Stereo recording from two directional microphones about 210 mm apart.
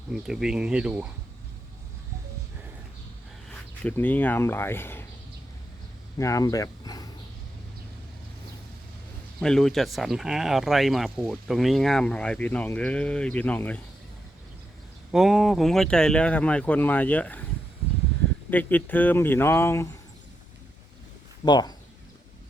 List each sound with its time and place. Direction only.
0.1 s speech: centre (ahead or behind)
3.8 s speech: 10° left (ahead or behind)
6.1 s speech: 15° left (ahead or behind)
9.4 s speech: 5° left (ahead or behind)
15.1 s speech: centre (ahead or behind)
18.5 s speech: 10° left (ahead or behind)
21.4 s speech: 20° left (ahead or behind)